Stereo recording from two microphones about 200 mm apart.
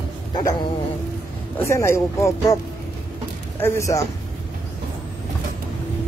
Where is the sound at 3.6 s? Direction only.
15° left (ahead or behind).